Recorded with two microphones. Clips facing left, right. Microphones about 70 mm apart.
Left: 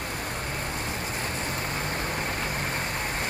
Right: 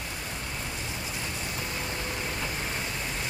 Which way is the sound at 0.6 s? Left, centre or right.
Left.